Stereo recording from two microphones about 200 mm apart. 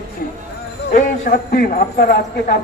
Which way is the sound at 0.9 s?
45° left (ahead or behind).